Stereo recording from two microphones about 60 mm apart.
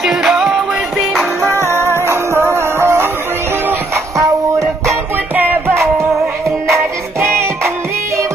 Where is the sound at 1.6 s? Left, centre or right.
Right.